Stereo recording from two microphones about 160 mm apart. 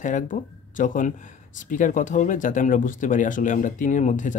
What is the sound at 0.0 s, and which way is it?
Speech, 55° left (ahead or behind).